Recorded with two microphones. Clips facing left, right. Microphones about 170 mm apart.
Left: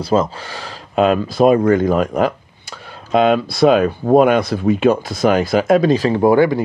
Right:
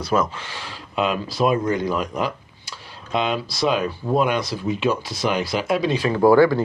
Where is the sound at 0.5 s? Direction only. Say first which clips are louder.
Left 5 dB; 40° left (ahead or behind).